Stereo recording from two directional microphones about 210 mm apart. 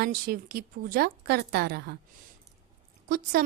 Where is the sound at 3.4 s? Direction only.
45° right (ahead or behind).